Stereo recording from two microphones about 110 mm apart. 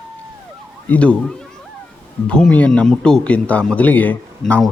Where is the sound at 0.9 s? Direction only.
10° left (ahead or behind).